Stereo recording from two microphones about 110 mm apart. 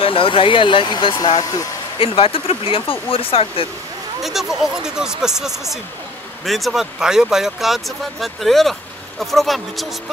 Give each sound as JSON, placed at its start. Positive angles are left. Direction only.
{"t": 0.0, "sound": "speech", "side_deg": 55}
{"t": 1.4, "sound": "speech", "side_deg": 35}
{"t": 2.0, "sound": "speech", "side_deg": 55}
{"t": 4.2, "sound": "speech", "side_deg": 0}